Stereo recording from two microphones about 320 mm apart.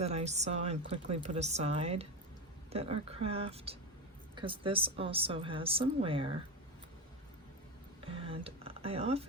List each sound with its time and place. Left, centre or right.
0.0 s a woman's voice: centre
8.0 s speech: centre